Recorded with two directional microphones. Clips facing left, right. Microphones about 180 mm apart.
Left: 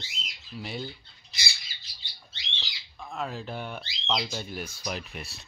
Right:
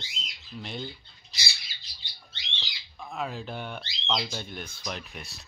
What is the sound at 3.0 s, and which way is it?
Speech, centre (ahead or behind).